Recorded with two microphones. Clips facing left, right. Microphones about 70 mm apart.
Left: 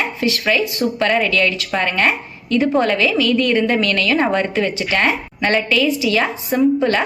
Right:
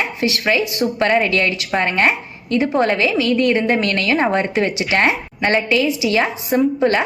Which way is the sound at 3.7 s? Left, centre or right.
Right.